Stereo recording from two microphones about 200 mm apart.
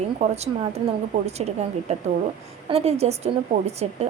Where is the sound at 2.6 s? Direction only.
30° right (ahead or behind).